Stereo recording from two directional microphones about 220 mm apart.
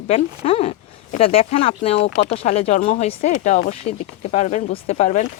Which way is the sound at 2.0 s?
55° left (ahead or behind).